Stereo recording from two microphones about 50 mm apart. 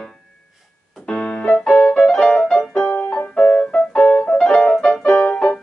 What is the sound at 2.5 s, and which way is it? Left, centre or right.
Music, left.